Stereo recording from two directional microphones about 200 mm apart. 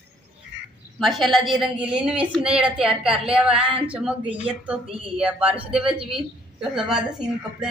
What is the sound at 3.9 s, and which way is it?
Speech, 5° right (ahead or behind).